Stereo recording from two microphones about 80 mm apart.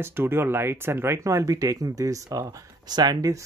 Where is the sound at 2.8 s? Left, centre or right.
Right.